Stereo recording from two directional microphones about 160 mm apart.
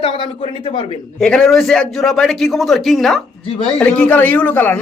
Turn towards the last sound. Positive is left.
turn(degrees=10)  # may be behind; listen again after turning